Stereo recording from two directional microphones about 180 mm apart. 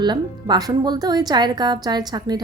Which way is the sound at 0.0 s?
25° right (ahead or behind).